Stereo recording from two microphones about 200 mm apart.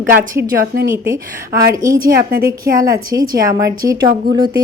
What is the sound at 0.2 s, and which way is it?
A woman's voice, 15° right (ahead or behind).